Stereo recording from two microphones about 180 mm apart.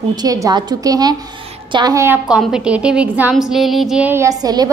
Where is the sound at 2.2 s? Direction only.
5° right (ahead or behind); by 4.7 s 20° right (ahead or behind).